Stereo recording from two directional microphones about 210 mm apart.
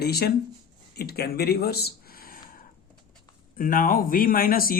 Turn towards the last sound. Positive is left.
turn(degrees=45)  # may be behind; listen again after turning